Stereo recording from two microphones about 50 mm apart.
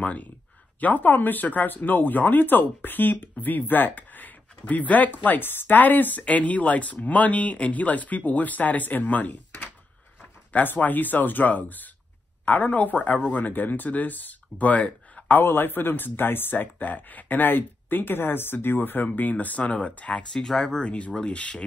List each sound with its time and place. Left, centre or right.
0.0 s speech: left
15.4 s speech: left
20.3 s speech: centre
20.6 s speech: left